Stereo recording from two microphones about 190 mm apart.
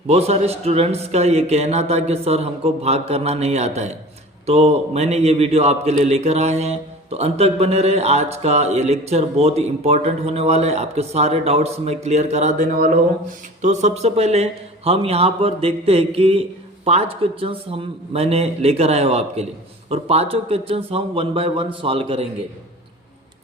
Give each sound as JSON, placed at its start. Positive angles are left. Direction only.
{"t": 0.1, "sound": "a man's voice", "side_deg": -35}